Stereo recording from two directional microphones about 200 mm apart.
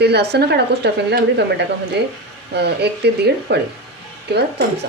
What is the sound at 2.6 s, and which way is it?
Speech, 55° right (ahead or behind).